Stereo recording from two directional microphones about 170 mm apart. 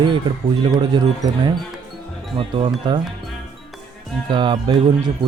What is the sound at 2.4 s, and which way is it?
Speech, 30° right (ahead or behind).